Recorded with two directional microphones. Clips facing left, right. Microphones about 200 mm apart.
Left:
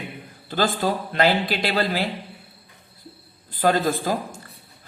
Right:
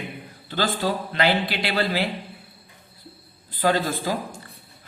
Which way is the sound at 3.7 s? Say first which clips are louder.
Left 2 dB; 50° left (ahead or behind).